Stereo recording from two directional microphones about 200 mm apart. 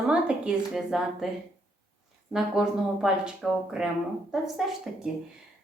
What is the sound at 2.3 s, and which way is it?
Speech, 5° right (ahead or behind).